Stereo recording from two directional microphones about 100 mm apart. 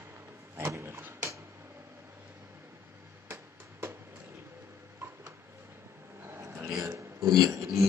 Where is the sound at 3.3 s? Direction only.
25° right (ahead or behind).